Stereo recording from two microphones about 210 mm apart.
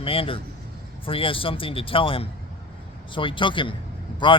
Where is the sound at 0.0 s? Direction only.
25° left (ahead or behind).